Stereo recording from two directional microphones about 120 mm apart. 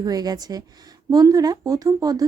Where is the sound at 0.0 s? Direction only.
35° right (ahead or behind).